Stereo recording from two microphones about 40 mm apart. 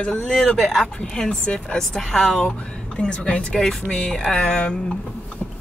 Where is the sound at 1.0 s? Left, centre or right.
Centre.